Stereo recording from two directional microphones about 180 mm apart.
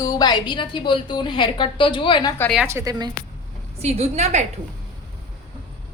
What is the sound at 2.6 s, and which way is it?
Speech, 15° right (ahead or behind).